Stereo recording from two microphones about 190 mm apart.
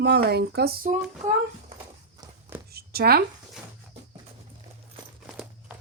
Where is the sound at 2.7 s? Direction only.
55° right (ahead or behind).